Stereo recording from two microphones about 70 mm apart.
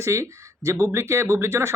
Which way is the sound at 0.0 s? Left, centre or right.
Right.